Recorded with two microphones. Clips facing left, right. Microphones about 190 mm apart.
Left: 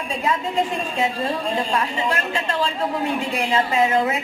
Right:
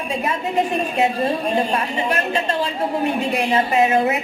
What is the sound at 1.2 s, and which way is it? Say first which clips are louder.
Speech: right 4 dB; 25° right (ahead or behind).